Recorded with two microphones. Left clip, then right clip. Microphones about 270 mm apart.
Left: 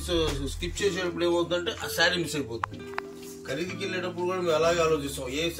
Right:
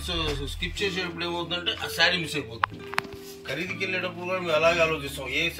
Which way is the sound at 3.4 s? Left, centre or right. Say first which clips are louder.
Right 2 dB; centre.